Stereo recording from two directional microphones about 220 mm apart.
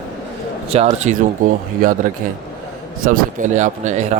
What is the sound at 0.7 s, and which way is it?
Speech, 30° right (ahead or behind).